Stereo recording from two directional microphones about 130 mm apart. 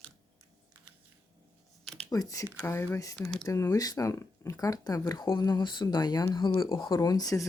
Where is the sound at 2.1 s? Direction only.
25° left (ahead or behind).